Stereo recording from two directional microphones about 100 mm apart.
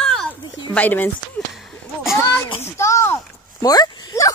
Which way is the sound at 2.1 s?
25° left (ahead or behind).